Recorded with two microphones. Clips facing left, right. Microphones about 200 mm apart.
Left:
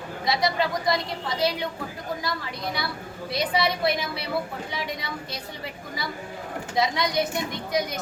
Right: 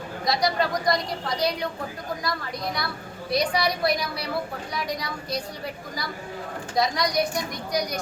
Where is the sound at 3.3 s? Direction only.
25° left (ahead or behind).